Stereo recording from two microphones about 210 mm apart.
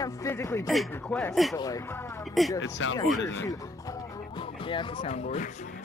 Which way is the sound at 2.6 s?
60° left (ahead or behind).